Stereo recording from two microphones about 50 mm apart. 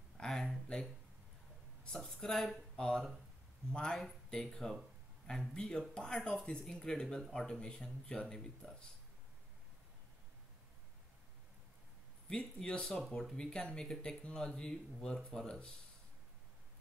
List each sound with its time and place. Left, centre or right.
0.2 s a sound: centre
1.9 s a sound: centre
2.5 s speech: centre
7.2 s speech: centre
7.4 s speech: centre
12.3 s speech: centre